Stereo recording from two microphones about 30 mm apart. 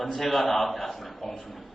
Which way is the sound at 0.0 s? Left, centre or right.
Centre.